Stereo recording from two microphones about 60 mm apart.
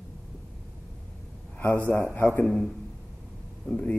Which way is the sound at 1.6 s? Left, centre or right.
Left.